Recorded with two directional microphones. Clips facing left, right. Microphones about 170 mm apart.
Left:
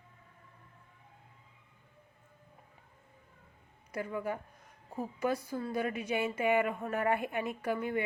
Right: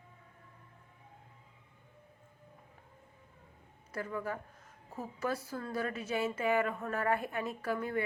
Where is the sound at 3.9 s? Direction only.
15° left (ahead or behind).